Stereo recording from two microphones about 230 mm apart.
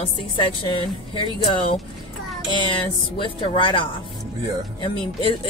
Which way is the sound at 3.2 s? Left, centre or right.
Left.